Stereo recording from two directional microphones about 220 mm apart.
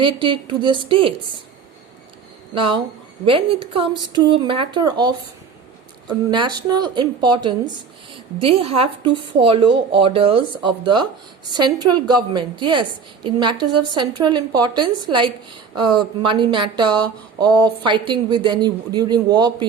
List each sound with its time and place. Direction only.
0.0 s speech: 20° right (ahead or behind)
2.6 s speech: 25° right (ahead or behind)